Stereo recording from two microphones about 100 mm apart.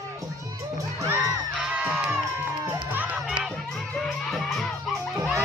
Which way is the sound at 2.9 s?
15° right (ahead or behind).